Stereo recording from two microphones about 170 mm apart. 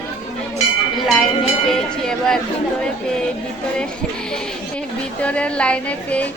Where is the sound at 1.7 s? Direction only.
5° left (ahead or behind).